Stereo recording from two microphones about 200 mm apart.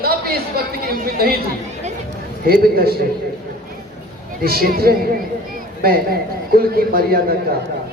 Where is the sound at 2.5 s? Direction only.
50° right (ahead or behind).